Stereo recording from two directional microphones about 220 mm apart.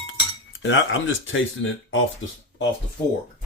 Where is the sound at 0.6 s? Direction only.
60° left (ahead or behind).